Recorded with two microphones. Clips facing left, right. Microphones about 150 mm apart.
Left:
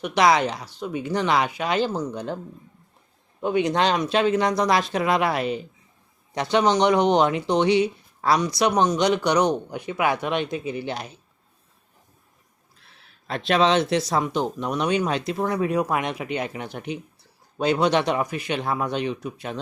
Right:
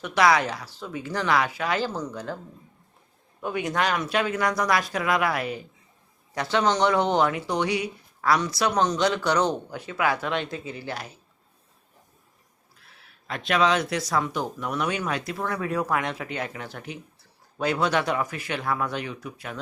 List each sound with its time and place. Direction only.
0.0 s speech: 20° left (ahead or behind)
3.4 s speech: 20° left (ahead or behind)
13.2 s speech: 30° left (ahead or behind)